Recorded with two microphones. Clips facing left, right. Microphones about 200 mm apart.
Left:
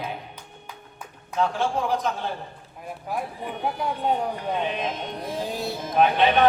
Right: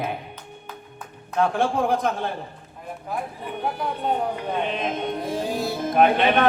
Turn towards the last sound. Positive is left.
turn(degrees=-55)  # may be behind; listen again after turning